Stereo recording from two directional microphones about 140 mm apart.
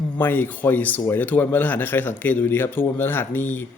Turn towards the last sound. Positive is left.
turn(degrees=15)  # may be behind; listen again after turning